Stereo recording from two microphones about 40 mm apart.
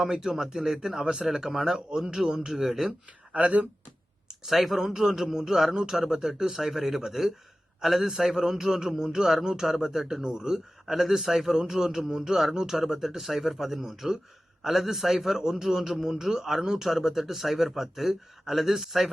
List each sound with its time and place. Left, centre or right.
0.0 s a man's voice: centre
2.5 s a man's voice: centre
3.3 s speech: right
4.4 s a man's voice: centre